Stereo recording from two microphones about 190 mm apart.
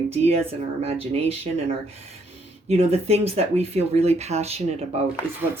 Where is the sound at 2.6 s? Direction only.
35° right (ahead or behind).